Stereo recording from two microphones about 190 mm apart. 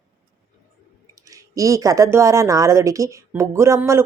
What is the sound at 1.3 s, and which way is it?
Speech, 15° right (ahead or behind).